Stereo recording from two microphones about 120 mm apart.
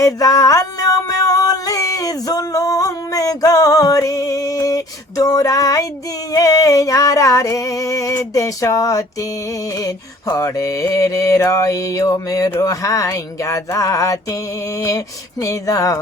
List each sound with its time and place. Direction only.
0.0 s music: 30° left (ahead or behind)
6.3 s mantra: 30° left (ahead or behind)